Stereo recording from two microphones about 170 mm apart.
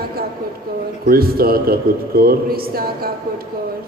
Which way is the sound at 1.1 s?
60° right (ahead or behind).